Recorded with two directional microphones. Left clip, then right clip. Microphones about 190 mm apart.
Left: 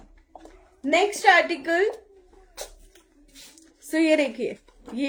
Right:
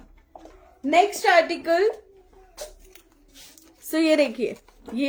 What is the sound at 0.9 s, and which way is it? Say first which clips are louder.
Speech: even; 20° right (ahead or behind).